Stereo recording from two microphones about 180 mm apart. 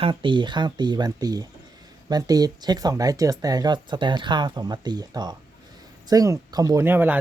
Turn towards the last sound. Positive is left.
turn(degrees=-10)  # may be behind; listen again after turning